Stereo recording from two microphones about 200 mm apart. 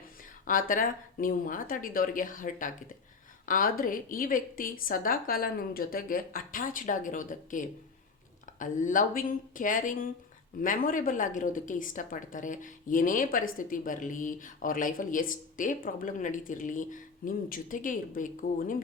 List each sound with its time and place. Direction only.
0.4 s a woman's voice: 40° left (ahead or behind)